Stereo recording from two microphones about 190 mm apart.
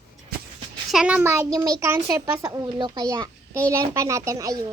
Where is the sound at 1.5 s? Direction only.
20° right (ahead or behind).